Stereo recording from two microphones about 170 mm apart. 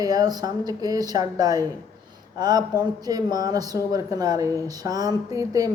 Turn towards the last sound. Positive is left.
turn(degrees=-20)  # may be behind; listen again after turning